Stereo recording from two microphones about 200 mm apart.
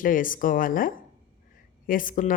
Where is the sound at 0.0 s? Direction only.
45° left (ahead or behind).